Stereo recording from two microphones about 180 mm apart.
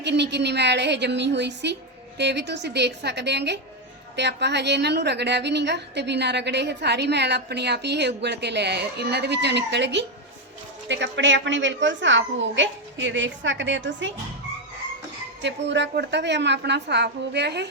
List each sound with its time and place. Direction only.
0.0 s a woman's voice: 70° right (ahead or behind)
10.8 s a child's voice: 85° right
15.4 s a woman's voice: 75° right (ahead or behind)